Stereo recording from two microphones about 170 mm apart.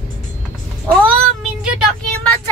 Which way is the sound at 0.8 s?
Centre (ahead or behind).